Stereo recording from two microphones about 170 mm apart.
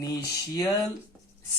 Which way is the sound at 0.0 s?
20° left (ahead or behind).